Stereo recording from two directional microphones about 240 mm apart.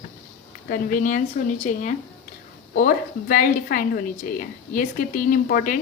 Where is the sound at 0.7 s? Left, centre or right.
Left.